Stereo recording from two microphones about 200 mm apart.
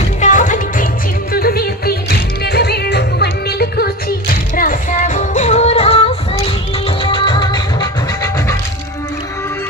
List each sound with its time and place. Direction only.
0.2 s music: 40° left (ahead or behind)
1.3 s music: 50° left (ahead or behind); by 8.5 s 20° left (ahead or behind)